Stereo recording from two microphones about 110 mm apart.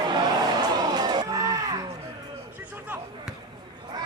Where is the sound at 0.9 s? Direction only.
40° right (ahead or behind).